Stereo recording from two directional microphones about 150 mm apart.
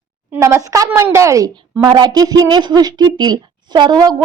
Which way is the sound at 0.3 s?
20° right (ahead or behind).